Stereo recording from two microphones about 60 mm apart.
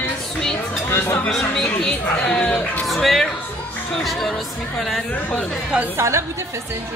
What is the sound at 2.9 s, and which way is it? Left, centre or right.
Speech, centre.